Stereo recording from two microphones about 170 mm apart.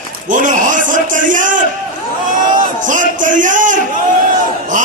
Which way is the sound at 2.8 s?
50° right (ahead or behind).